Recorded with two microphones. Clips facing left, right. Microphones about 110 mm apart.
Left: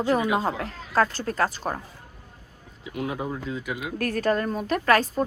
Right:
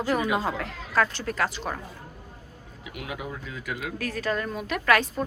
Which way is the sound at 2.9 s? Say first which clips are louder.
Left 6 dB; 35° left (ahead or behind).